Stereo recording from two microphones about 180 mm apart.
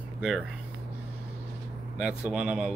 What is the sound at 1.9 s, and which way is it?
Speech, 5° right (ahead or behind).